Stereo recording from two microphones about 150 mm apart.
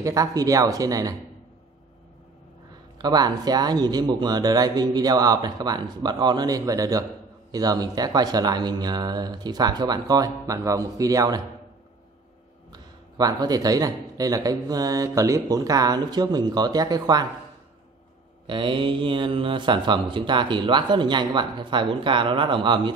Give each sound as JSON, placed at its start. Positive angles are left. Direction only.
{"t": 0.0, "sound": "speech", "side_deg": -20}
{"t": 3.0, "sound": "speech", "side_deg": -25}
{"t": 12.7, "sound": "speech", "side_deg": -25}
{"t": 18.5, "sound": "speech", "side_deg": -35}